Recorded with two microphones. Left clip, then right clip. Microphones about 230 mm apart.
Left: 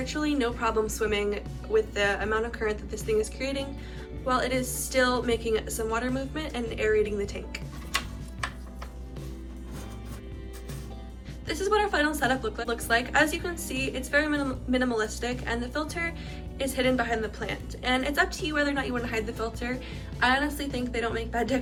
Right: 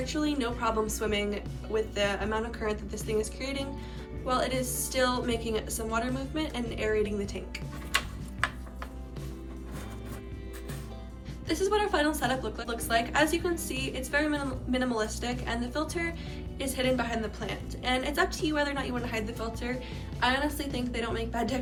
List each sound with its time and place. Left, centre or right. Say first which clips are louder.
0.0 s a woman's voice: left 3 dB; centre
11.4 s a woman's voice: left 2 dB; centre